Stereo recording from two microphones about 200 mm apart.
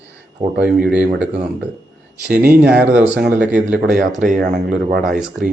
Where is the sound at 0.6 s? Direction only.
5° right (ahead or behind).